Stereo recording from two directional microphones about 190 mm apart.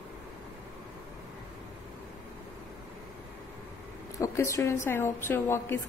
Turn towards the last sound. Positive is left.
turn(degrees=15)  # may be behind; listen again after turning